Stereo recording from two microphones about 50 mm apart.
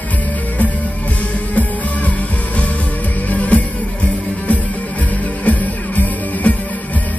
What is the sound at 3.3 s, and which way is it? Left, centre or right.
Music, left.